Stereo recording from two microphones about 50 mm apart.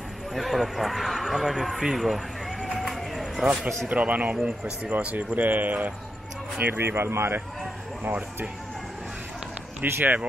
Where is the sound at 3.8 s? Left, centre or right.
Right.